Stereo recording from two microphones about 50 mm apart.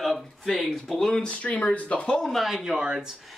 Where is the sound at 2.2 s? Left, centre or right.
Centre.